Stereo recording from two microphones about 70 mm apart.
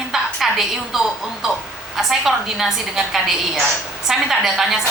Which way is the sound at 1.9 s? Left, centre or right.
Centre.